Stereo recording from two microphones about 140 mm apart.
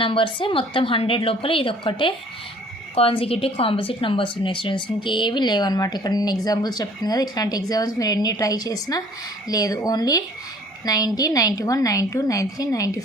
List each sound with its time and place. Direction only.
0.0 s a woman's voice: 35° left (ahead or behind)